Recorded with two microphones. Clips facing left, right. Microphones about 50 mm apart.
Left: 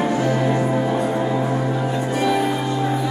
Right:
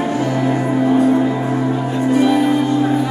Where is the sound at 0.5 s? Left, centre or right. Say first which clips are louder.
Right 5 dB; centre.